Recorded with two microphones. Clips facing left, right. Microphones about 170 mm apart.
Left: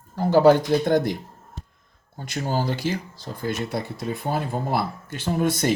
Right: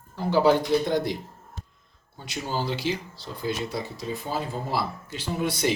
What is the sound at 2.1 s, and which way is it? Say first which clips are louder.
Speech: left 4 dB; 50° left (ahead or behind).